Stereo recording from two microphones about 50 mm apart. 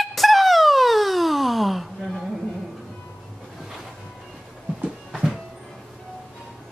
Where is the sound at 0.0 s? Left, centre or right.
Centre.